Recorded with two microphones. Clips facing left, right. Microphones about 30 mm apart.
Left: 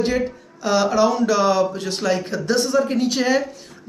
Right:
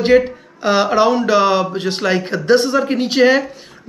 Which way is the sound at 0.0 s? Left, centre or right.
Right.